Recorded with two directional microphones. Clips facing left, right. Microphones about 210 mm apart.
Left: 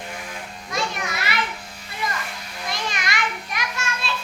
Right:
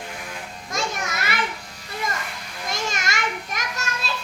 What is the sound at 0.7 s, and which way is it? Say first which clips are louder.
Children playing: left 1 dB; 45° right (ahead or behind).